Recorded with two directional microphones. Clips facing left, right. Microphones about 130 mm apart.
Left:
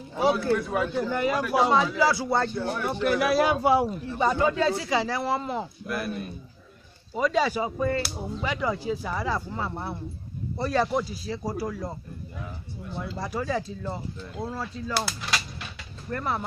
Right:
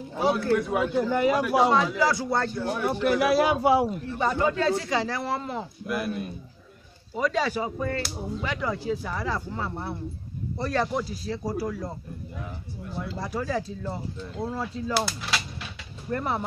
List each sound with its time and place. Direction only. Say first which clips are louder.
0.2 s speech: even; 5° left (ahead or behind)
0.7 s a man's voice: right 2 dB; 5° right (ahead or behind)
2.0 s speech: left 1 dB; 10° left (ahead or behind)
2.7 s a man's voice: right 3 dB; 10° right (ahead or behind)
4.2 s speech: left 1 dB; 15° left (ahead or behind)
5.9 s speech: right 4 dB; 5° right (ahead or behind)
7.2 s speech: left 2 dB; 10° left (ahead or behind)
13.2 s speech: even; centre (ahead or behind)
14.5 s speech: right 4 dB; 20° right (ahead or behind)
15.0 s mechanisms: even; centre (ahead or behind)
16.1 s speech: right 1 dB; 20° right (ahead or behind)